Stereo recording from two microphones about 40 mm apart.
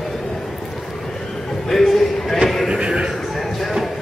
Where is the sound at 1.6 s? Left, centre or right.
Centre.